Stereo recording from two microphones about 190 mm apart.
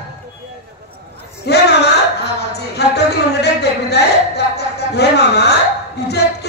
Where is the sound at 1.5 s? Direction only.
60° left (ahead or behind).